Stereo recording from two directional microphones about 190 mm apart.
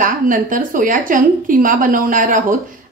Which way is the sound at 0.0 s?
45° right (ahead or behind).